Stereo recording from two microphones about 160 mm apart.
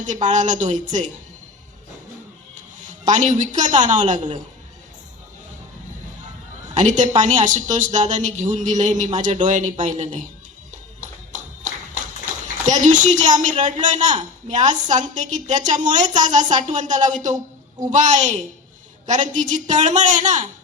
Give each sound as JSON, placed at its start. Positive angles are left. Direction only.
{"t": 0.0, "sound": "a woman's voice", "side_deg": -50}
{"t": 2.6, "sound": "a woman's voice", "side_deg": -50}
{"t": 6.7, "sound": "a woman's voice", "side_deg": -50}
{"t": 11.0, "sound": "music", "side_deg": -50}
{"t": 12.6, "sound": "a woman's voice", "side_deg": -50}